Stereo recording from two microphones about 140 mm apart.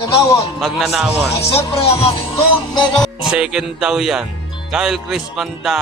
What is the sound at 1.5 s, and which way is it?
Music, 45° left (ahead or behind).